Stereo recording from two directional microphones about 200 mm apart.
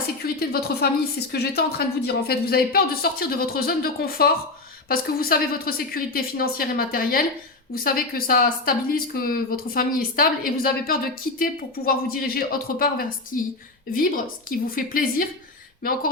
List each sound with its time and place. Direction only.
0.2 s a woman's voice: 50° left (ahead or behind)